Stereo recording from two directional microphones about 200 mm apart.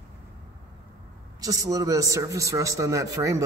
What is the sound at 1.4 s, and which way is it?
A man's voice, 15° right (ahead or behind).